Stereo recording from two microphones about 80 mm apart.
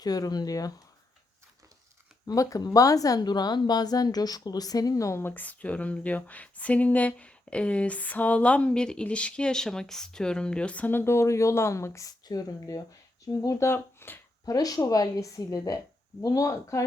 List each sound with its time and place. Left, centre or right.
0.0 s speech: left
2.2 s speech: left
5.2 s speech: left
14.4 s speech: left